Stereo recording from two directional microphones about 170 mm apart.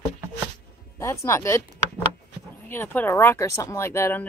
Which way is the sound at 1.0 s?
15° left (ahead or behind).